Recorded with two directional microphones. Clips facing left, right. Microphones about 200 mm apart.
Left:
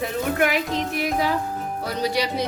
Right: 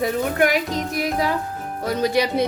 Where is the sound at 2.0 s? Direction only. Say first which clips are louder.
Right 4 dB; 50° right (ahead or behind).